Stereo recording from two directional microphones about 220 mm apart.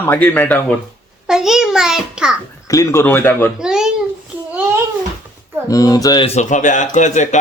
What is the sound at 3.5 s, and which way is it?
Speech, 5° right (ahead or behind).